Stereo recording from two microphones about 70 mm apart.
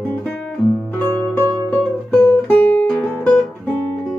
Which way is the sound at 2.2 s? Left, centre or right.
Left.